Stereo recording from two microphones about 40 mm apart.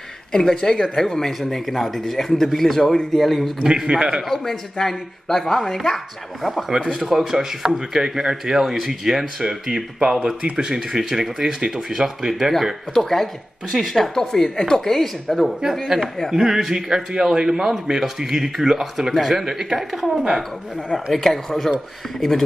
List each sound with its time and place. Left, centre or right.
0.3 s a man's voice: centre
3.6 s speech: centre
4.3 s a man's voice: centre
12.9 s speech: centre
16.3 s a man's voice: centre
20.9 s speech: centre